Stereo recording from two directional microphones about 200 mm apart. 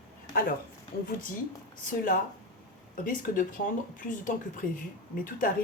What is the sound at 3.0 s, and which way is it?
Speech, 45° left (ahead or behind).